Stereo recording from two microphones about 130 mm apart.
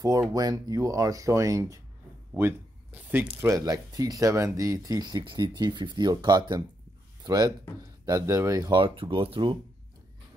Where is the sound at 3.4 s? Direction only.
25° right (ahead or behind).